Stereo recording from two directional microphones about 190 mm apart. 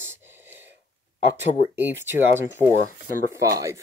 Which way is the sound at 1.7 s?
10° right (ahead or behind).